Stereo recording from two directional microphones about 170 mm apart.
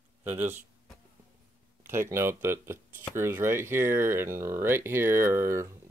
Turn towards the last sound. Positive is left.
turn(degrees=-15)  # may be behind; listen again after turning